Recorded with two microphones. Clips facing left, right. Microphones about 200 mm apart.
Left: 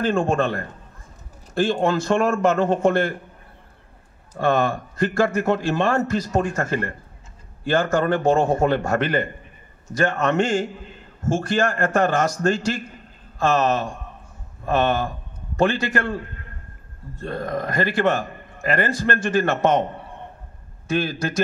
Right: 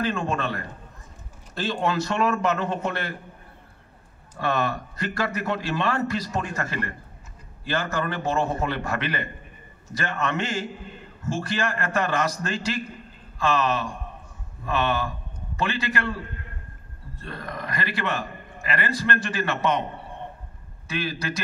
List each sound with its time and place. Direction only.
0.0 s a man's voice: 50° left (ahead or behind)
4.4 s a man's voice: 50° left (ahead or behind)